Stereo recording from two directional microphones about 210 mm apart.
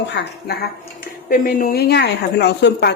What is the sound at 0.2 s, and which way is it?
A woman's voice, 50° left (ahead or behind).